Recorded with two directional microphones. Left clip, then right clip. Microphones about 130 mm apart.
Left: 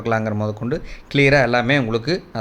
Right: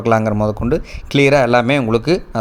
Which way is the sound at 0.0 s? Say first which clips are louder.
Right 6 dB; 55° right (ahead or behind).